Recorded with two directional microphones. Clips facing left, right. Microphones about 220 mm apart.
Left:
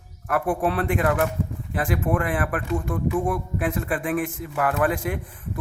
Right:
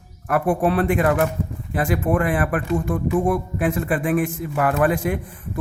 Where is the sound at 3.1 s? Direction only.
40° right (ahead or behind).